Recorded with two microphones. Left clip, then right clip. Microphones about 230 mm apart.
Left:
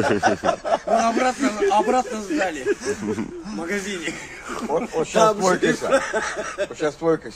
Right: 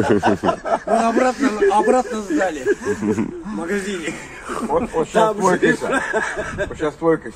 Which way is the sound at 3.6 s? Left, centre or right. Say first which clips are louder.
Right 3 dB; centre.